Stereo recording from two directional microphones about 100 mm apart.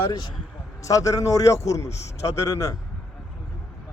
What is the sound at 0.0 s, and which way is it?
A man's voice, 45° left (ahead or behind).